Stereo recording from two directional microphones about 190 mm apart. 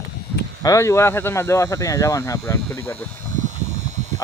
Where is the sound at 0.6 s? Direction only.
15° left (ahead or behind).